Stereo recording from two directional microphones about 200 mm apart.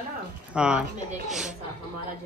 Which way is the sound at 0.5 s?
5° right (ahead or behind).